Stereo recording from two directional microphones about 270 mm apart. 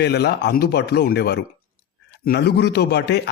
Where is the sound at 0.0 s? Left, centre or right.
Left.